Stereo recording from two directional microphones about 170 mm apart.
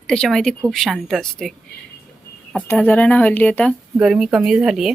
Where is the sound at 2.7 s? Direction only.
5° left (ahead or behind).